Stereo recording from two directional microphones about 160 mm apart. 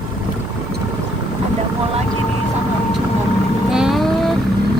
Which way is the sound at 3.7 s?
Centre (ahead or behind).